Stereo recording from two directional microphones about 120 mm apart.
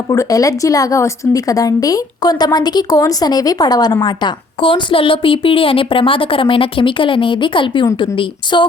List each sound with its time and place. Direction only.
0.1 s a woman's voice: 30° left (ahead or behind)